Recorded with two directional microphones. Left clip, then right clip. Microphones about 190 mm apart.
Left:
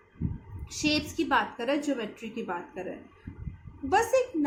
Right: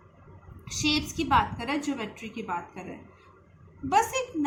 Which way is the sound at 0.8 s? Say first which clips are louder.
Right 1 dB; 35° right (ahead or behind).